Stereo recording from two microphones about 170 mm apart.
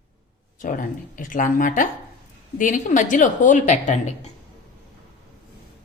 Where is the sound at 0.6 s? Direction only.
55° left (ahead or behind).